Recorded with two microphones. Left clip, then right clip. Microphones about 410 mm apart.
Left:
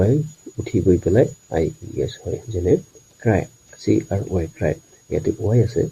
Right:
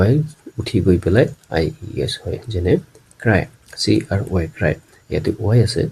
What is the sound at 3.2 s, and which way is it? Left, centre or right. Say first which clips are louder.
Speech: right 3 dB; left.